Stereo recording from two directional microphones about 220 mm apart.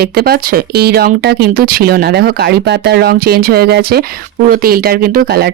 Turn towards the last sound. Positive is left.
turn(degrees=-45)  # may be behind; listen again after turning